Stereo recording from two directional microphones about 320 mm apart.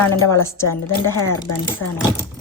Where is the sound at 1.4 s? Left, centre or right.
Left.